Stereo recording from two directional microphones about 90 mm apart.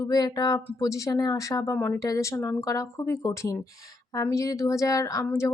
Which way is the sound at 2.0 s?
35° left (ahead or behind).